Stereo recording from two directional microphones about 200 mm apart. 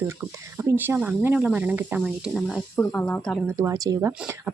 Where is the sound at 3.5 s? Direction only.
15° right (ahead or behind).